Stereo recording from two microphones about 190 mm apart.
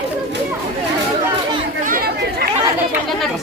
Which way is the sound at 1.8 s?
50° right (ahead or behind).